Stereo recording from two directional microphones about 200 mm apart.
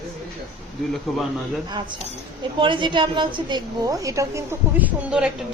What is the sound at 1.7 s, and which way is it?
A woman's voice, 20° right (ahead or behind).